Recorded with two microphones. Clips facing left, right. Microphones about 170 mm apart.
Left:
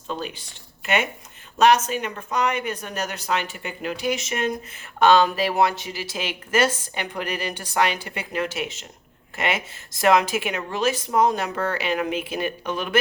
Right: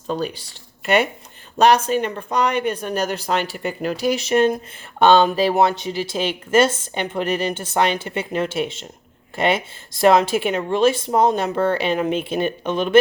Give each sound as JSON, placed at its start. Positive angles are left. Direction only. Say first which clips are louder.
{"t": 0.1, "sound": "speech", "louder": "right 6 dB", "side_deg": -40}
{"t": 1.5, "sound": "speech", "louder": "right 3 dB", "side_deg": -35}